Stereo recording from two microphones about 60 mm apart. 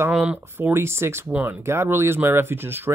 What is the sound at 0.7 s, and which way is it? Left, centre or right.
Speech, right.